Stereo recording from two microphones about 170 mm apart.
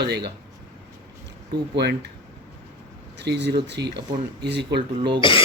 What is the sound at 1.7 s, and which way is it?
Speech, 80° right.